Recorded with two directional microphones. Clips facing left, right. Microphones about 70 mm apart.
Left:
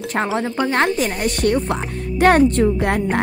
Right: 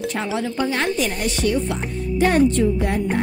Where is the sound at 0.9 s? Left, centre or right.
Left.